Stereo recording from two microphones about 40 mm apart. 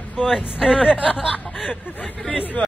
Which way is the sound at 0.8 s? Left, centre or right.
Right.